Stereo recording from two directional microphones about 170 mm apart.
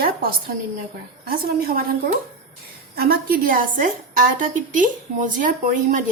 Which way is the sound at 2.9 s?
60° right (ahead or behind).